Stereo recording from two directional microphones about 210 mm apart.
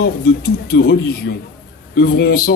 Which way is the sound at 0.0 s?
45° left (ahead or behind).